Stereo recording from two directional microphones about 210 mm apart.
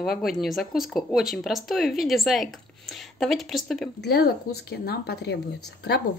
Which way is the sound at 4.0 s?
50° left (ahead or behind).